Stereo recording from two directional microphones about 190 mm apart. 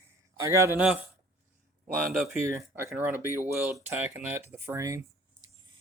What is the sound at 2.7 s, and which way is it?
Speech, 10° right (ahead or behind).